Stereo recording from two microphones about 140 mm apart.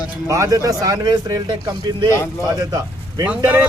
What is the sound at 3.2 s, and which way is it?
Speech, 10° right (ahead or behind).